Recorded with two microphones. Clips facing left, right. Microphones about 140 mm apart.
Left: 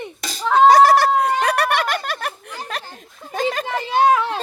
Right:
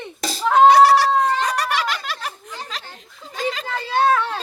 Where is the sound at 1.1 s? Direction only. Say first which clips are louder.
Even; 10° left (ahead or behind).